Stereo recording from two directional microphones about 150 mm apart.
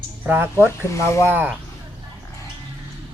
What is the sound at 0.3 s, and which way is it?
Speech, 15° right (ahead or behind).